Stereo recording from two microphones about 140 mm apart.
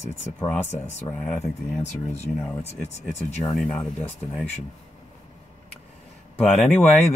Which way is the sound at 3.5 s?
Centre (ahead or behind).